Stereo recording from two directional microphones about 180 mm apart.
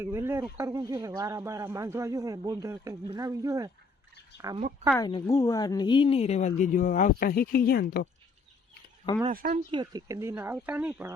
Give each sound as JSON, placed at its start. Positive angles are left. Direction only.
{"t": 0.0, "sound": "speech", "side_deg": -15}
{"t": 4.9, "sound": "speech", "side_deg": 20}
{"t": 9.3, "sound": "speech", "side_deg": -50}
{"t": 9.7, "sound": "speech", "side_deg": -20}